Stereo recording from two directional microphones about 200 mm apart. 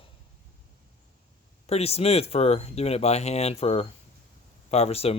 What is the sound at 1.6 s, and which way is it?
Speech, 30° left (ahead or behind).